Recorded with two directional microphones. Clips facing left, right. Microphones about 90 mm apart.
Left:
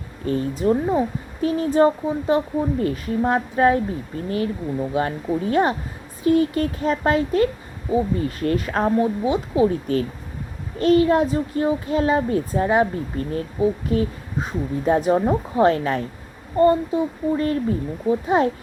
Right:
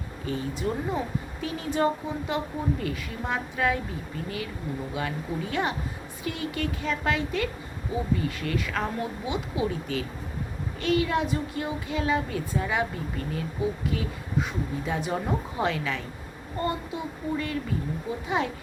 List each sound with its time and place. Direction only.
0.3 s speech: 40° left (ahead or behind)
4.9 s speech: 40° left (ahead or behind)